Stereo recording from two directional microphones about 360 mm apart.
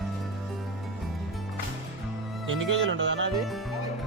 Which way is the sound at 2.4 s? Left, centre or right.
Right.